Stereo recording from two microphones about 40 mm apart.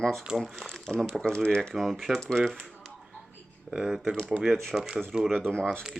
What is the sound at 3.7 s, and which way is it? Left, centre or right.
Speech, centre.